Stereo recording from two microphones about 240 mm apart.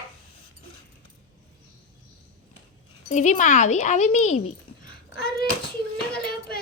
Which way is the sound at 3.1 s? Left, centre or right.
Left.